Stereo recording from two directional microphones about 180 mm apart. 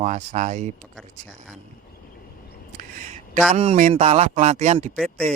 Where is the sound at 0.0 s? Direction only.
40° right (ahead or behind).